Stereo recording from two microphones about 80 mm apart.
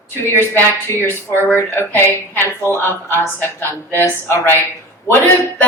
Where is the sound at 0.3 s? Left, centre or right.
Left.